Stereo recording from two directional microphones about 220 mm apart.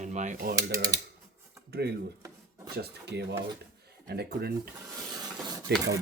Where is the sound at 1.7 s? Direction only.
45° right (ahead or behind).